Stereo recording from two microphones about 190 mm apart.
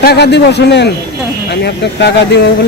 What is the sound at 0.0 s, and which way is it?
Speech, 60° left (ahead or behind).